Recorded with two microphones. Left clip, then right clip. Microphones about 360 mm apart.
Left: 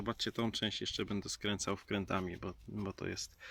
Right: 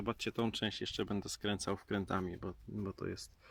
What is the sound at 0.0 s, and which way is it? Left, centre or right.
Speech, centre.